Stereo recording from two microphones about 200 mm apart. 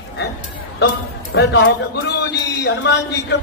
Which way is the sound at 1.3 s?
55° left (ahead or behind).